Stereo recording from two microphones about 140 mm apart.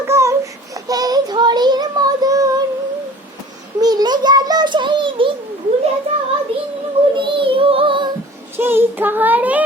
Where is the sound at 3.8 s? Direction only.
30° right (ahead or behind).